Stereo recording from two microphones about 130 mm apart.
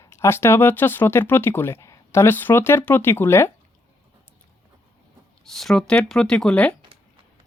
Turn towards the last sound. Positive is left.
turn(degrees=5)  # may be behind; listen again after turning